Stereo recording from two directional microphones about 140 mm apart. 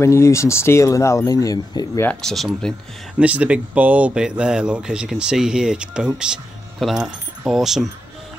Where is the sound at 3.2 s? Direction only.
10° right (ahead or behind).